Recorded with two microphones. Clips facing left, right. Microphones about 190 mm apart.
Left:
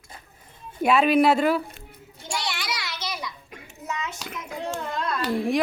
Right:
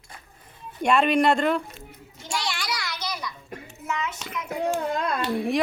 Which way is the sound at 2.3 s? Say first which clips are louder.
Right 1 dB; 20° left (ahead or behind).